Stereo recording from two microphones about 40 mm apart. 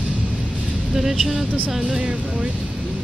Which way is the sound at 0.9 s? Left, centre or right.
Centre.